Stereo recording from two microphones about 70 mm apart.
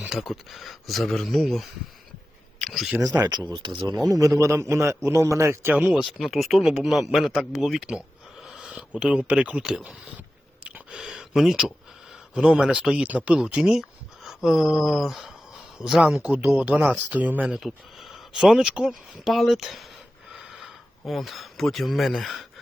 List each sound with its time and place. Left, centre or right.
0.1 s speech: centre
4.1 s a man's voice: right
6.0 s speech: centre
8.4 s a sound: centre
8.9 s speech: centre
10.6 s a sound: right
10.9 s speech: centre
16.2 s speech: right
17.6 s speech: centre
19.1 s speech: centre
21.1 s speech: centre